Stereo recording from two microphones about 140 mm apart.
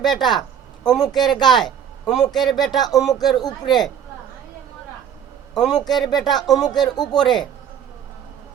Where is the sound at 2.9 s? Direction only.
25° left (ahead or behind).